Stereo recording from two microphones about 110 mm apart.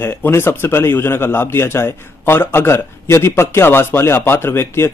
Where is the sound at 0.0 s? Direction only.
20° left (ahead or behind).